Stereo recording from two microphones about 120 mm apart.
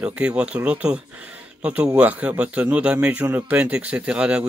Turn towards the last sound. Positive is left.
turn(degrees=-10)  # may be behind; listen again after turning